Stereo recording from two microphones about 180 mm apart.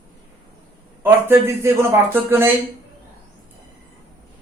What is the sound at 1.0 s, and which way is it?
A man's voice, 15° right (ahead or behind).